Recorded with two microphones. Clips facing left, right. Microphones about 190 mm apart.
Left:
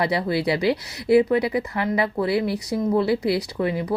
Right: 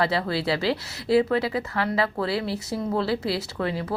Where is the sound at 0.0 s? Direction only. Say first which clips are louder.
Left 2 dB; 20° left (ahead or behind).